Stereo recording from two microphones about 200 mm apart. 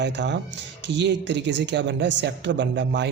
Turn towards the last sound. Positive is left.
turn(degrees=-65)  # may be behind; listen again after turning